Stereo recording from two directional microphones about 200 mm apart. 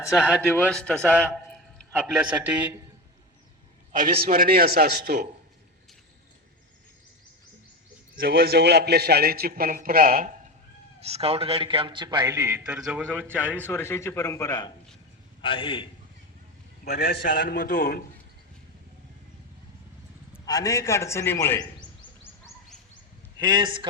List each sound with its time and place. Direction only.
0.2 s a man's voice: 5° left (ahead or behind)
1.9 s a man's voice: 5° right (ahead or behind)
3.9 s a man's voice: 45° right (ahead or behind)
8.1 s a man's voice: 50° right (ahead or behind)
11.0 s a man's voice: 30° right (ahead or behind); by 13.5 s 10° right (ahead or behind)
13.5 s a man's voice: 10° left (ahead or behind); by 15.9 s 25° left (ahead or behind)
16.8 s a man's voice: 50° left (ahead or behind)
20.4 s a man's voice: 20° left (ahead or behind)
23.4 s a man's voice: 20° right (ahead or behind)